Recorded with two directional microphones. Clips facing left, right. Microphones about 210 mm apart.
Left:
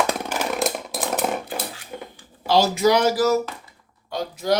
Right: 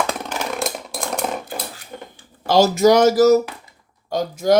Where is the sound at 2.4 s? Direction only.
45° right (ahead or behind).